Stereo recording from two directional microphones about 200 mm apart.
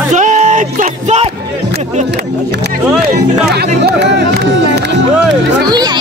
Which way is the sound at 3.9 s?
55° right (ahead or behind).